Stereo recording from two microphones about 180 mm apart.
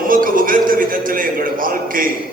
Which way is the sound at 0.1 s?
50° right (ahead or behind).